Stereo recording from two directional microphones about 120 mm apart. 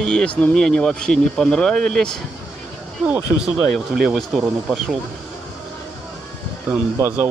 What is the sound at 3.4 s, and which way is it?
Speech, 5° right (ahead or behind).